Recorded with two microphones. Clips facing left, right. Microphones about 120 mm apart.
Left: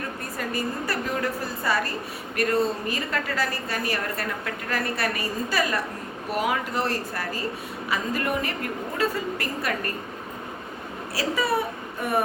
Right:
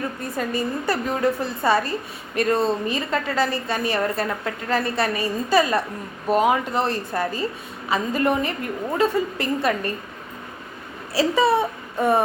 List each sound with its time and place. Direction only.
0.3 s a woman's voice: 25° right (ahead or behind)
11.1 s speech: 25° right (ahead or behind)